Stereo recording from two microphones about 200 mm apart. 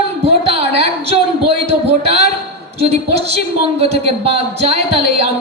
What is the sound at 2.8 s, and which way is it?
A man's voice, 30° right (ahead or behind).